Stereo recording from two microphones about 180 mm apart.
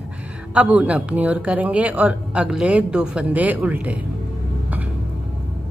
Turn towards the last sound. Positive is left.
turn(degrees=-10)  # may be behind; listen again after turning